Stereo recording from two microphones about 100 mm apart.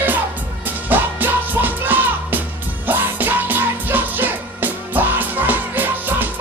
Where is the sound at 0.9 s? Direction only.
20° right (ahead or behind).